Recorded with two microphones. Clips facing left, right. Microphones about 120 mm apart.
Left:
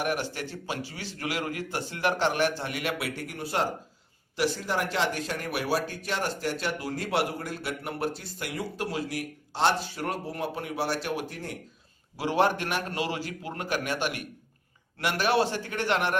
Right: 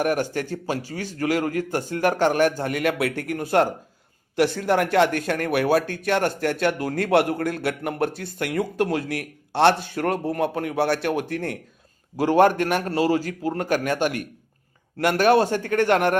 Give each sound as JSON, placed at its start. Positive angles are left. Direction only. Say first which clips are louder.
{"t": 0.0, "sound": "a man's voice", "louder": "right 7 dB", "side_deg": -45}
{"t": 12.1, "sound": "a man's voice", "louder": "right 8 dB", "side_deg": -45}